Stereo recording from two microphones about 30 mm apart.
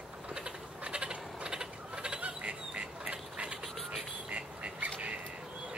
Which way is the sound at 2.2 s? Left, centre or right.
Right.